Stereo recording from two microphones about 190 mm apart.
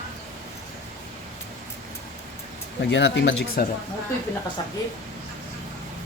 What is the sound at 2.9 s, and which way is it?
Speech, 70° left (ahead or behind).